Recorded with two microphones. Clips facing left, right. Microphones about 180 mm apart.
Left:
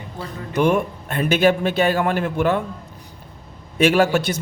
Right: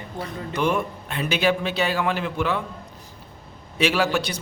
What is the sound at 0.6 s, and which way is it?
A man's voice, 50° left (ahead or behind).